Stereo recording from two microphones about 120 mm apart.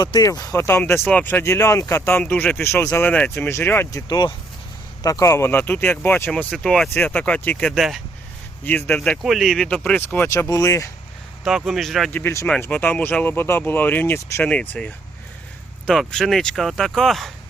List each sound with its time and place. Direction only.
0.0 s speech: 35° left (ahead or behind); by 3.8 s 15° left (ahead or behind)
3.9 s speech: 35° left (ahead or behind); by 10.2 s 15° left (ahead or behind)
10.5 s speech: 25° left (ahead or behind)
11.4 s speech: centre (ahead or behind)
12.1 s speech: 20° left (ahead or behind)
15.9 s speech: centre (ahead or behind)